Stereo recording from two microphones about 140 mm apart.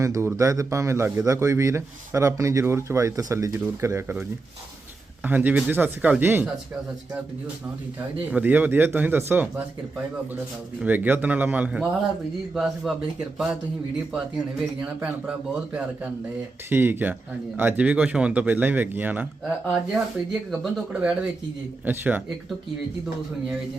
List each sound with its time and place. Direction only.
0.0 s a man's voice: 20° right (ahead or behind)
5.2 s speech: 10° right (ahead or behind)
8.3 s speech: 10° right (ahead or behind)
10.8 s speech: 10° right (ahead or behind)
16.6 s speech: 15° right (ahead or behind)
19.6 s speech: centre (ahead or behind)